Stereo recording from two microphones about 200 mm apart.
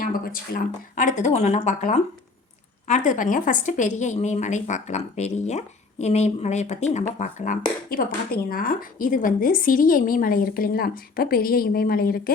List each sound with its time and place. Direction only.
0.0 s a woman's voice: 45° left (ahead or behind)
7.9 s a woman's voice: 50° left (ahead or behind)